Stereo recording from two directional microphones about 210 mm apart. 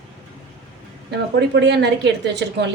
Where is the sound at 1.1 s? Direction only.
55° right (ahead or behind).